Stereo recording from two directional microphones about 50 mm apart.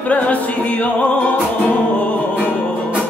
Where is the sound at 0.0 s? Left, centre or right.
Left.